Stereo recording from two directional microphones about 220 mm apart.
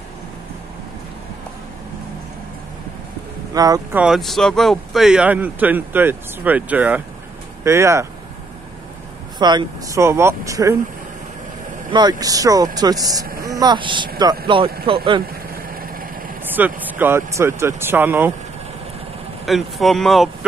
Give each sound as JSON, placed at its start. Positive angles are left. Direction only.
{"t": 3.5, "sound": "speech", "side_deg": -15}
{"t": 4.0, "sound": "speech", "side_deg": 0}
{"t": 9.4, "sound": "speech", "side_deg": -20}
{"t": 11.9, "sound": "speech", "side_deg": -20}
{"t": 15.5, "sound": "vehicle", "side_deg": -40}
{"t": 16.4, "sound": "speech", "side_deg": -10}
{"t": 19.4, "sound": "speech", "side_deg": 0}